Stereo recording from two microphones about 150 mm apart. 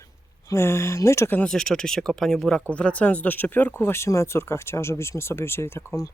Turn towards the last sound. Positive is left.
turn(degrees=15)  # may be behind; listen again after turning